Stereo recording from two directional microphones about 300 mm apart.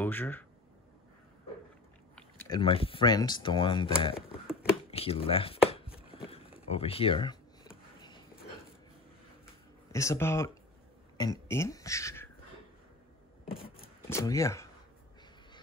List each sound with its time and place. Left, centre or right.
0.0 s speech: centre
2.1 s speech: centre
4.9 s chopping: centre
9.9 s speech: centre
14.0 s speech: centre